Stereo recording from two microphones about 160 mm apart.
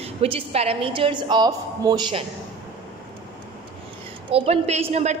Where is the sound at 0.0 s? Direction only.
40° right (ahead or behind).